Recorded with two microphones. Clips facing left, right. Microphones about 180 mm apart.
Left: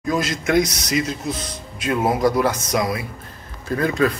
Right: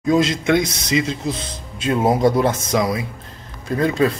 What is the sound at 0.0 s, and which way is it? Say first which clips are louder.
Speech: right 5 dB; 25° right (ahead or behind).